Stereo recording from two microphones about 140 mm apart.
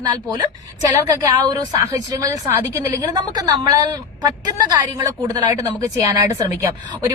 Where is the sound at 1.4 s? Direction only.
25° right (ahead or behind).